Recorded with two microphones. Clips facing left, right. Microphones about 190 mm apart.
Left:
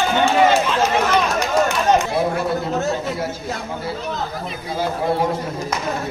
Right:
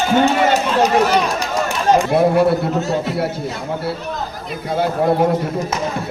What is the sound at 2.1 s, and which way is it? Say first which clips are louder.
Speech: right 7 dB; 60° right (ahead or behind).